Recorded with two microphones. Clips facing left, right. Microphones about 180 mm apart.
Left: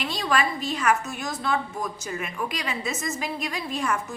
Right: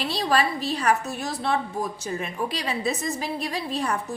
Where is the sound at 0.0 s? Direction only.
35° right (ahead or behind).